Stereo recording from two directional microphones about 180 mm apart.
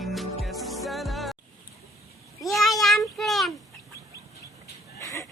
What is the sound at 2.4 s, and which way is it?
Child singing, centre (ahead or behind).